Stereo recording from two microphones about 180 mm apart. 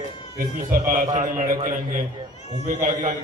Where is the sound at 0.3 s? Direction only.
50° right (ahead or behind).